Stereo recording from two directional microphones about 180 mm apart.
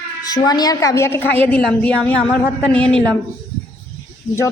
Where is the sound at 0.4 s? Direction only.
20° left (ahead or behind); by 3.0 s 5° left (ahead or behind).